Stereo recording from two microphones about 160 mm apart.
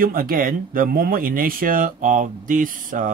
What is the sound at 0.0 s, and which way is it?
Speech, 65° right (ahead or behind).